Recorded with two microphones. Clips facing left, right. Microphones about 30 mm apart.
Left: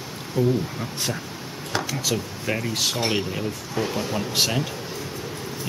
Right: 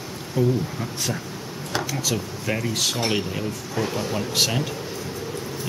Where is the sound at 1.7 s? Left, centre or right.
Centre.